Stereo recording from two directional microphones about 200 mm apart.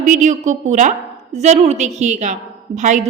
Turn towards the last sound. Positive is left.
turn(degrees=-35)  # may be behind; listen again after turning